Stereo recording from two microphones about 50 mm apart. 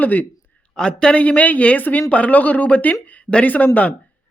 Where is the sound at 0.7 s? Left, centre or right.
Centre.